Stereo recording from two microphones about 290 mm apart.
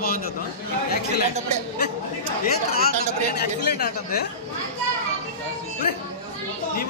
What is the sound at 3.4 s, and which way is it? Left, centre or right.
Speech, left.